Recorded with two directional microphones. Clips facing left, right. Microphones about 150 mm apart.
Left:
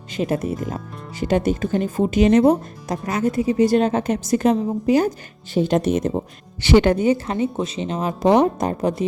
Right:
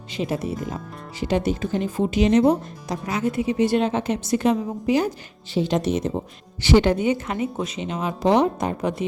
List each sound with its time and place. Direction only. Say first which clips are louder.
0.1 s speech: left 3 dB; 50° left (ahead or behind)
6.9 s speech: left 3 dB; 40° left (ahead or behind)